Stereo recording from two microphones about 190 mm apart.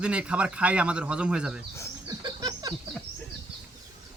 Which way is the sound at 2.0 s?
20° right (ahead or behind).